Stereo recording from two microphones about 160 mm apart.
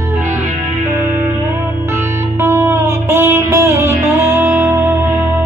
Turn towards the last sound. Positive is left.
turn(degrees=-15)  # may be behind; listen again after turning